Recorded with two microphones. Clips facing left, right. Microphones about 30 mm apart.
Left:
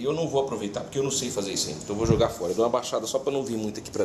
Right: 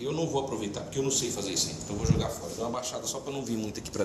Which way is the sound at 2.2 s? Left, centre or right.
Left.